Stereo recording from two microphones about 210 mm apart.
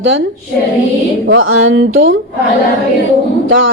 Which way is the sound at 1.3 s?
65° right (ahead or behind).